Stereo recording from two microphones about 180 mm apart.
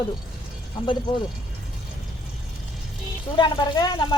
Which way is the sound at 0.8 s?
25° left (ahead or behind).